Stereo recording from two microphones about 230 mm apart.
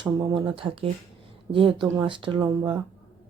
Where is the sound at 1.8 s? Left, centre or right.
Right.